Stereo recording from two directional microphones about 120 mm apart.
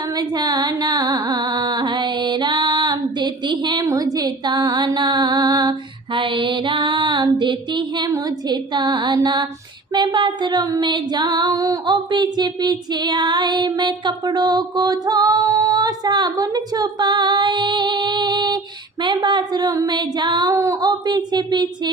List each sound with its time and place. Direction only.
0.2 s carnatic music: 35° right (ahead or behind)
6.1 s music: 45° right (ahead or behind)
8.1 s female singing: 35° right (ahead or behind)